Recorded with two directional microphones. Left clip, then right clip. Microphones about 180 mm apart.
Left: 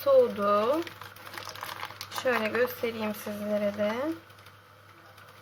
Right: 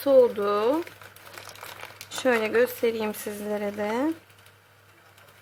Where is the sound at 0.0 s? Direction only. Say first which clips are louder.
Right 3 dB; 35° right (ahead or behind).